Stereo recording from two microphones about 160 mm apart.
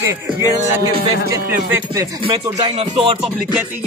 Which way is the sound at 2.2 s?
35° right (ahead or behind).